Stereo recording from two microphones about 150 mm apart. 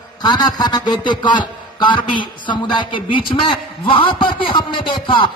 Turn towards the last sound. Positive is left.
turn(degrees=35)  # may be behind; listen again after turning